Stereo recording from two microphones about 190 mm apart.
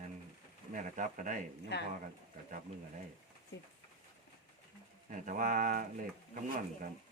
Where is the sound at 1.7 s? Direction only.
65° left (ahead or behind).